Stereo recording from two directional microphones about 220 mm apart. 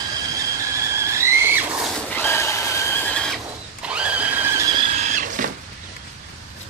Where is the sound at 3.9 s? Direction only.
5° right (ahead or behind).